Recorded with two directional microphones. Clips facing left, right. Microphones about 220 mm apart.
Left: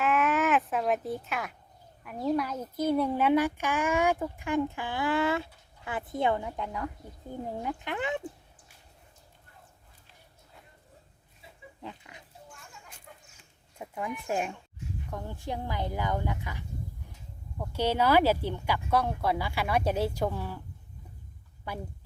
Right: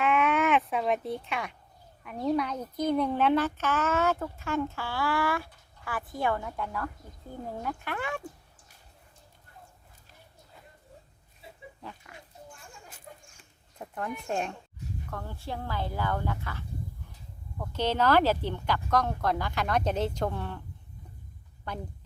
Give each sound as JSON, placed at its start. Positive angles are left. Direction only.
{"t": 0.0, "sound": "a sound", "side_deg": 0}
{"t": 2.0, "sound": "a child's voice", "side_deg": 5}
{"t": 11.8, "sound": "pig", "side_deg": 20}
{"t": 13.1, "sound": "a sound", "side_deg": -35}
{"t": 13.7, "sound": "a child's voice", "side_deg": 10}
{"t": 21.7, "sound": "a child's voice", "side_deg": 10}